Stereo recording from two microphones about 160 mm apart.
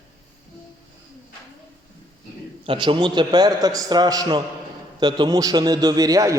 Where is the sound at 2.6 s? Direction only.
35° right (ahead or behind).